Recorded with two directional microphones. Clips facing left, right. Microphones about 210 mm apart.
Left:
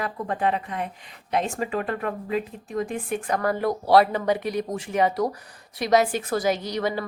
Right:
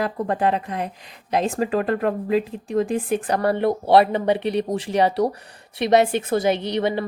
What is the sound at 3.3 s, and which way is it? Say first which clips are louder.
Speech: right 3 dB; 30° right (ahead or behind).